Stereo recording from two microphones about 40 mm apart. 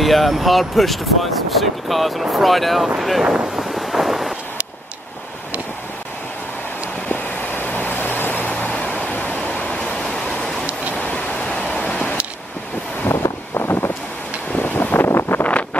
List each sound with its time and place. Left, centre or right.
0.0 s speech: centre
3.5 s wind noise: centre
7.6 s vehicle: left
8.5 s vehicle: left
9.1 s vehicle: left
9.4 s vehicle: left
9.8 s a sound: left
10.4 s vehicle: centre
11.0 s a sound: left
13.1 s vehicle: left
14.6 s wind noise: left
15.0 s wind noise: left
15.4 s wind noise: left